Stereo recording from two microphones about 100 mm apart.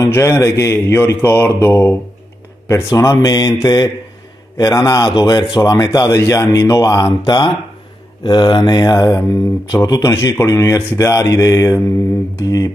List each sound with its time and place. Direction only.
0.0 s mantra: 25° left (ahead or behind)
2.7 s speech: 30° left (ahead or behind)
7.1 s speech: 50° left (ahead or behind)